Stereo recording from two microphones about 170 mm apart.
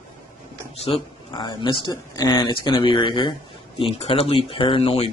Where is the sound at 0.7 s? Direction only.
35° left (ahead or behind).